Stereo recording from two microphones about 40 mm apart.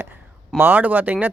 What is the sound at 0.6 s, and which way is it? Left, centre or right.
Speech, right.